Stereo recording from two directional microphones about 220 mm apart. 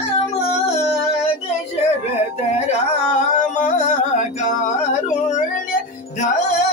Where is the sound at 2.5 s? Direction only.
30° left (ahead or behind).